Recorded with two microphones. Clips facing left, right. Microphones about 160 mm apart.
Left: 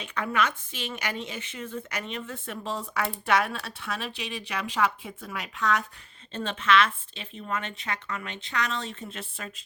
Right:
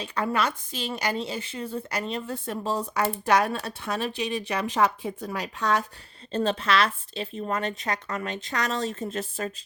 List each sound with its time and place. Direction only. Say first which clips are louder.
0.0 s a woman's voice: right 2 dB; 35° right (ahead or behind)